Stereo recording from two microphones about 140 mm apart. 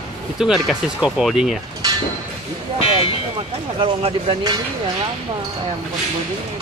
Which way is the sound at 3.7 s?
35° right (ahead or behind).